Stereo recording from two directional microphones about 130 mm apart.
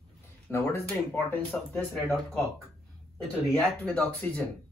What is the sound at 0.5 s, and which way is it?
Speech, 20° left (ahead or behind).